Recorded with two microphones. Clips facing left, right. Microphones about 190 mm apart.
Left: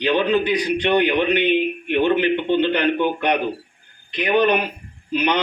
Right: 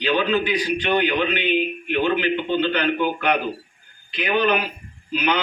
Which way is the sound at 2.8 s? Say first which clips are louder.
Left 2 dB; 20° left (ahead or behind).